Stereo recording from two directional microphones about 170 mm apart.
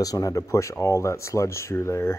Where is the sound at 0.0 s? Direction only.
20° left (ahead or behind).